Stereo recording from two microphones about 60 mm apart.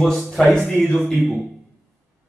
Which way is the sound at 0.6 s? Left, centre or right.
Left.